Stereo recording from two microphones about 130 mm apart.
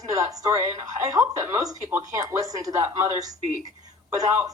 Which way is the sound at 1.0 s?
25° right (ahead or behind).